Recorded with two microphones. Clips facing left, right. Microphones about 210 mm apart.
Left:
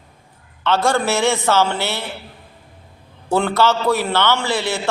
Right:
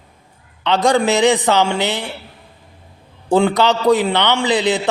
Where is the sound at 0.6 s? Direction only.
15° right (ahead or behind).